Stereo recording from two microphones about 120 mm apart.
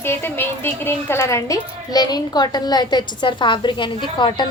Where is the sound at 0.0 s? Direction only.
20° left (ahead or behind).